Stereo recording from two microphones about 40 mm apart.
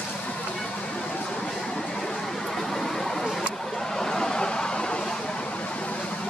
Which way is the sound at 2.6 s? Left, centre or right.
Centre.